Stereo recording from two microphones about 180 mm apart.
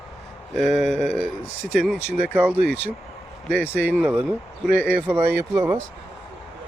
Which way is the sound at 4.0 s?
5° right (ahead or behind).